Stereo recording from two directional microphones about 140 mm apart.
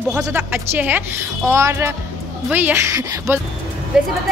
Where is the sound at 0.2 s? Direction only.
15° right (ahead or behind).